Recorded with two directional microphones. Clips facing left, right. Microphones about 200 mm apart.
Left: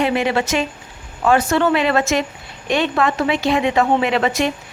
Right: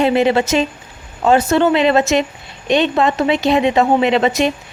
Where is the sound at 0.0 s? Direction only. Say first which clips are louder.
Right 4 dB; 30° right (ahead or behind).